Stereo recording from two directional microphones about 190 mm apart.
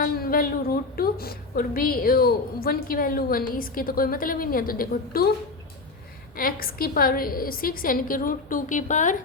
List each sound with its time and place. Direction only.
0.0 s a woman's voice: 50° left (ahead or behind)
6.3 s a woman's voice: 50° left (ahead or behind)